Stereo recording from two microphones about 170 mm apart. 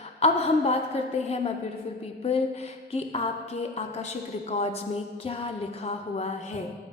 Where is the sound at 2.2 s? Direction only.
35° left (ahead or behind).